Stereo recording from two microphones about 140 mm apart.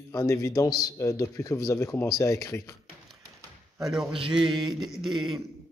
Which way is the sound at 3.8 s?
5° right (ahead or behind).